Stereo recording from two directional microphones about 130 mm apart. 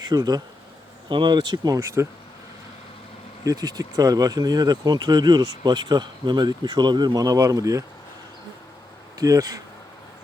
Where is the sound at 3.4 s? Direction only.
30° right (ahead or behind).